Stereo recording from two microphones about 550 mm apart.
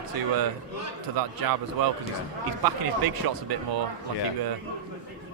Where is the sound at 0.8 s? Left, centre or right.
Right.